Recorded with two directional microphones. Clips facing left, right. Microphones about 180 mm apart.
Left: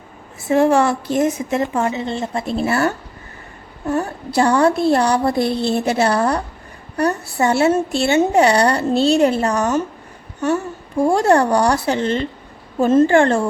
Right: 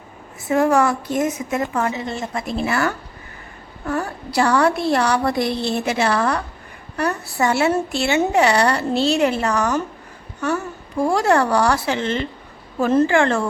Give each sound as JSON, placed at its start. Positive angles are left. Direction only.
{"t": 0.4, "sound": "a woman's voice", "side_deg": 25}
{"t": 11.0, "sound": "speech", "side_deg": 30}
{"t": 12.8, "sound": "a woman's voice", "side_deg": 25}
{"t": 13.1, "sound": "speech", "side_deg": 40}